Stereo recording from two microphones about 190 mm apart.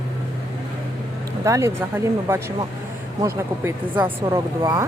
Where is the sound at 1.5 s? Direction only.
15° right (ahead or behind).